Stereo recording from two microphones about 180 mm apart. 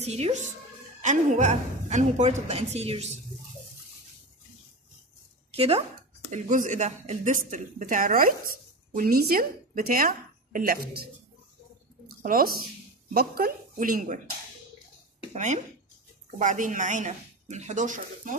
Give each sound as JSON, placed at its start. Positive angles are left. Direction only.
{"t": 0.0, "sound": "a woman's voice", "side_deg": -35}
{"t": 5.5, "sound": "speech", "side_deg": -35}
{"t": 6.3, "sound": "a woman's voice", "side_deg": -45}
{"t": 12.2, "sound": "a woman's voice", "side_deg": -55}
{"t": 15.3, "sound": "a woman's voice", "side_deg": -40}